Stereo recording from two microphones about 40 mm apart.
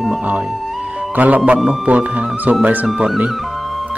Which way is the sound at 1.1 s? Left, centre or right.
Right.